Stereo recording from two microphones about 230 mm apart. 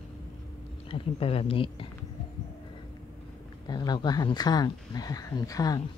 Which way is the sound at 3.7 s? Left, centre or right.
Centre.